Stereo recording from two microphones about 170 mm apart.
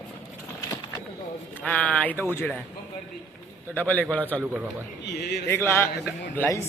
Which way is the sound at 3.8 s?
10° left (ahead or behind).